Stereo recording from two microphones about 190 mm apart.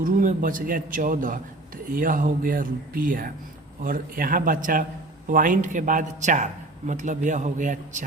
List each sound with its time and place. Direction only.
0.0 s a man's voice: 45° right (ahead or behind)